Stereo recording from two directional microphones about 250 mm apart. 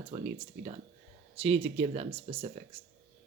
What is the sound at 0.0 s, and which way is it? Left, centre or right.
Speech, right.